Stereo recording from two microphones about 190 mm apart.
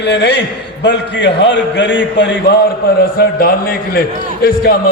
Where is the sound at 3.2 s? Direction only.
50° left (ahead or behind).